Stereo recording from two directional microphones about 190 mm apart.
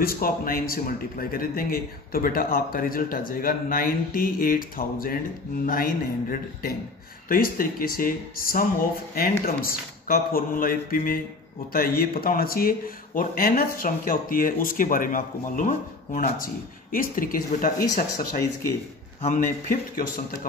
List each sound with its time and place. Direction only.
0.0 s a man's voice: 50° left (ahead or behind)
16.9 s a man's voice: 50° left (ahead or behind)
19.2 s a man's voice: 40° left (ahead or behind)